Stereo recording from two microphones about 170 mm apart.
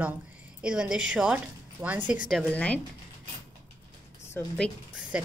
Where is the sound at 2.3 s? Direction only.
10° left (ahead or behind).